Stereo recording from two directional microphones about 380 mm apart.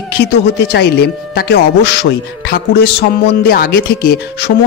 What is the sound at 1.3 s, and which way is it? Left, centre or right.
A man's voice, left.